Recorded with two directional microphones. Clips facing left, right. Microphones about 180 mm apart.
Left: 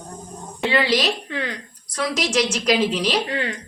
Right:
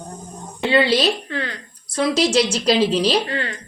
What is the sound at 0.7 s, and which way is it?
Speech, 30° right (ahead or behind).